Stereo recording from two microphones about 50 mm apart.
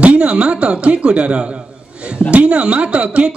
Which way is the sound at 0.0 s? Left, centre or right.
Right.